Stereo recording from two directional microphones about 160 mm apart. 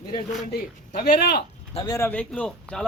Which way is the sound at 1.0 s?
85° left.